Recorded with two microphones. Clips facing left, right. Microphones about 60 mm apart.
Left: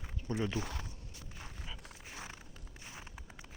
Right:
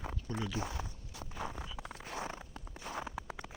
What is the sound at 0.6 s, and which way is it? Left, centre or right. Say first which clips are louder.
Speech: right 1 dB; left.